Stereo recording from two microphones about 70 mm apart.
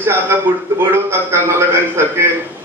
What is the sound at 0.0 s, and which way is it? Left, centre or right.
A man's voice, right.